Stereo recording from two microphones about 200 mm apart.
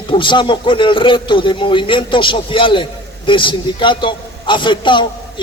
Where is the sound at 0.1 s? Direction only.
25° left (ahead or behind).